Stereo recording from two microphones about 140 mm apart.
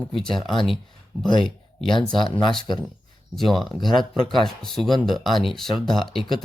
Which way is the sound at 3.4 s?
Centre (ahead or behind).